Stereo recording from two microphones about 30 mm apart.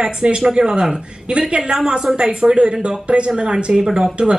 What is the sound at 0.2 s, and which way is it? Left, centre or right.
Speech, right.